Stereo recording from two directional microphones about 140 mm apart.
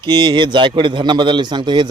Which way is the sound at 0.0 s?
35° right (ahead or behind).